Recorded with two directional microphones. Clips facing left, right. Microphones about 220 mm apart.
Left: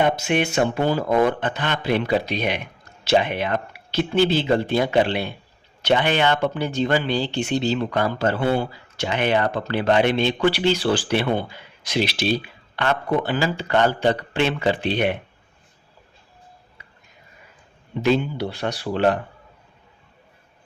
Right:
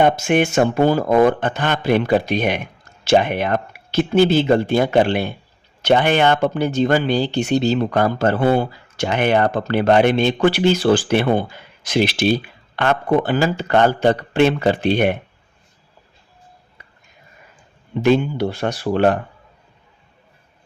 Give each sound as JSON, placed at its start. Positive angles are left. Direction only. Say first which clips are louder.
{"t": 0.0, "sound": "speech", "louder": "right 5 dB", "side_deg": -50}
{"t": 18.0, "sound": "speech", "louder": "right 4 dB", "side_deg": -50}